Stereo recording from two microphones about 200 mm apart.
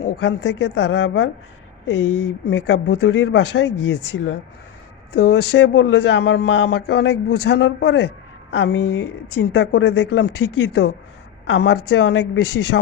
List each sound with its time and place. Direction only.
0.2 s a man's voice: 60° left (ahead or behind)
11.4 s a man's voice: 60° left (ahead or behind)